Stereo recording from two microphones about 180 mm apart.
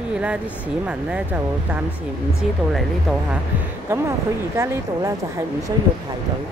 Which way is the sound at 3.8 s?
15° right (ahead or behind).